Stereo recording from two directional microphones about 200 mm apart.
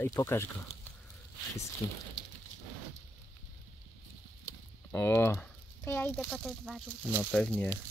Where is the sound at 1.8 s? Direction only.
25° left (ahead or behind).